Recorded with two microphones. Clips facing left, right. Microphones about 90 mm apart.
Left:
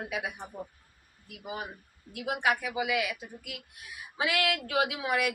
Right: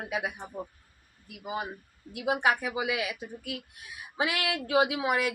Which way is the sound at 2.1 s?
25° right (ahead or behind).